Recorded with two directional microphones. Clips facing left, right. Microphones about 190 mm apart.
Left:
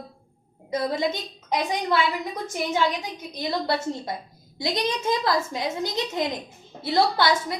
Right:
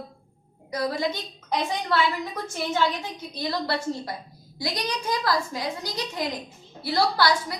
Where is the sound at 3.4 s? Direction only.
20° left (ahead or behind).